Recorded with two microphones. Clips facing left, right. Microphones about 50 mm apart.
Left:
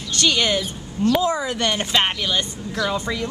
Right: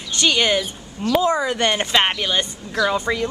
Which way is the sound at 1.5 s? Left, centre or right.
Centre.